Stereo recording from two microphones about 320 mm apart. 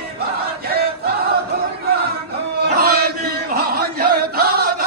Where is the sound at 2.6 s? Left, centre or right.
Right.